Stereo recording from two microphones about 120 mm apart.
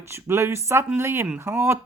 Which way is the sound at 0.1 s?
20° right (ahead or behind).